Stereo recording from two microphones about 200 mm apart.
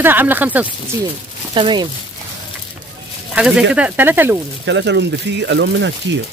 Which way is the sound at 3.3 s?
5° right (ahead or behind).